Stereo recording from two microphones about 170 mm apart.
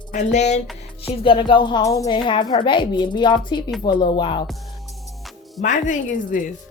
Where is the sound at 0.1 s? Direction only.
45° left (ahead or behind).